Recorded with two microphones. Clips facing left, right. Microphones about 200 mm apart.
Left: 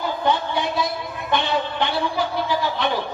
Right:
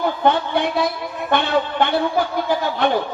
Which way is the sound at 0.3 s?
60° right (ahead or behind).